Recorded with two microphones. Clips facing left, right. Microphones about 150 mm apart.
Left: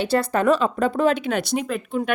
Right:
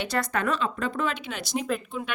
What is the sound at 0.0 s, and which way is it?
Speech, 30° left (ahead or behind).